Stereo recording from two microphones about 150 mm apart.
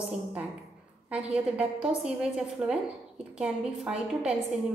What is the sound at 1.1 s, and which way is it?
A woman's voice, 10° right (ahead or behind).